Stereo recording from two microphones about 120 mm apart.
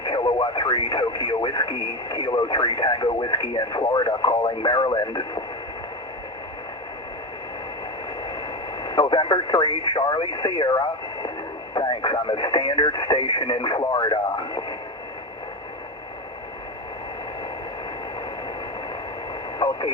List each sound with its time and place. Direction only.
0.0 s speech: 40° left (ahead or behind)
8.8 s speech: 40° left (ahead or behind)
19.5 s radio: 35° left (ahead or behind)